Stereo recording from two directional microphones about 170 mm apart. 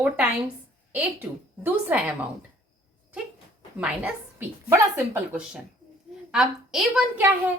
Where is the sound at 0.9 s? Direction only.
10° right (ahead or behind).